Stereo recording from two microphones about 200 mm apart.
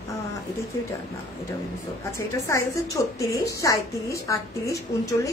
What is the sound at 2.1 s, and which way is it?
A woman's voice, 15° left (ahead or behind).